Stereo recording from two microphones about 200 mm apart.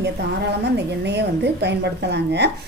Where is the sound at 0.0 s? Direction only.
60° right (ahead or behind).